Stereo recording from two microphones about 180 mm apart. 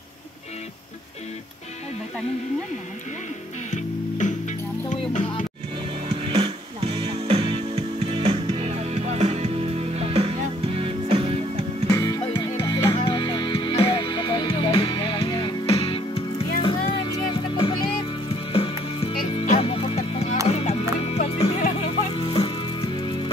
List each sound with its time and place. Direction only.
3.7 s music: 40° left (ahead or behind)
6.0 s music: 30° right (ahead or behind)
11.9 s music: 20° left (ahead or behind)